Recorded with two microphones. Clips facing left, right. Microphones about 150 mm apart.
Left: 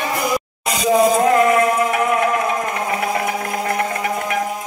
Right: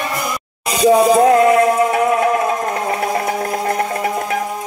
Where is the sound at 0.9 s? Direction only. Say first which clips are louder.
Right 4 dB; 35° right (ahead or behind).